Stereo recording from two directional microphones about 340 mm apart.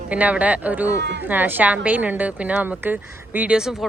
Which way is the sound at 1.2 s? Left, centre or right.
Centre.